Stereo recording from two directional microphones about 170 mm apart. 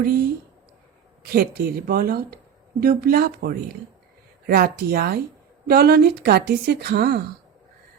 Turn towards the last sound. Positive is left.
turn(degrees=-70)  # may be behind; listen again after turning